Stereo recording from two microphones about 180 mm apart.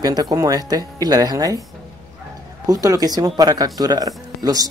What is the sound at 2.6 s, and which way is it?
Speech, 20° right (ahead or behind).